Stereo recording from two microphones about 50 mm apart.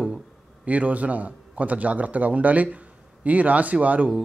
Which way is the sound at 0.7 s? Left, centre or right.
Right.